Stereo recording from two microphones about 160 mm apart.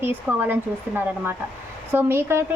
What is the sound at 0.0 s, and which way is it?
A woman's voice, 10° right (ahead or behind).